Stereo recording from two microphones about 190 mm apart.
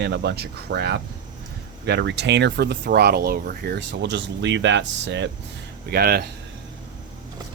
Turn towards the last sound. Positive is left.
turn(degrees=-55)  # may be behind; listen again after turning